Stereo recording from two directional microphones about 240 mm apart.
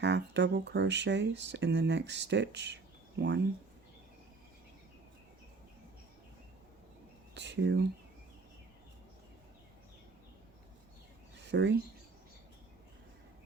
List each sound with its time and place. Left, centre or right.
0.0 s speech: right
7.3 s speech: right
11.4 s speech: right